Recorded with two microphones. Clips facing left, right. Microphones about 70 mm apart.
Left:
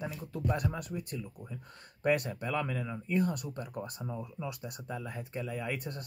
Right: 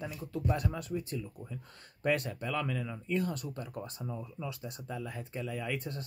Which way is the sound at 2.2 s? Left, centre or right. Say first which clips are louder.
Left 1 dB; left.